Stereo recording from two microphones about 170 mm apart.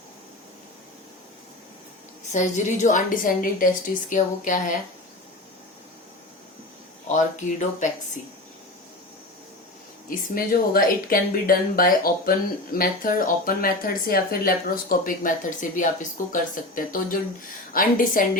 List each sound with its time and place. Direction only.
2.3 s a woman's voice: 45° left (ahead or behind)
7.1 s a woman's voice: 45° left (ahead or behind)
10.3 s a woman's voice: 60° left (ahead or behind)